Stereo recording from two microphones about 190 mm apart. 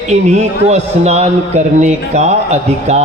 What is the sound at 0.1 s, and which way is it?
A man's voice, 40° right (ahead or behind).